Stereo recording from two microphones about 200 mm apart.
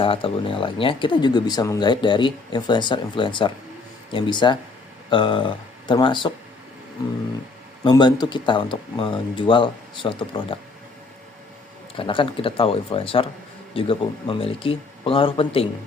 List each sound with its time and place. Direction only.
0.0 s speech: 25° left (ahead or behind)
11.9 s speech: 25° left (ahead or behind)